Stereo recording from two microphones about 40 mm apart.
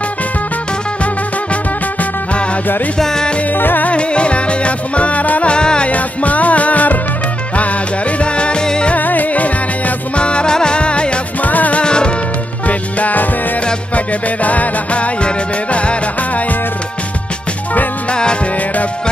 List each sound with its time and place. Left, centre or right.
1.5 s music: left
3.0 s music: centre
3.5 s music: left
3.8 s music: left
5.5 s music: left
5.9 s music: left
8.2 s music: left
8.9 s music: left
10.2 s music: left
11.4 s music: left
11.8 s music: left
12.6 s music: left
18.1 s music: left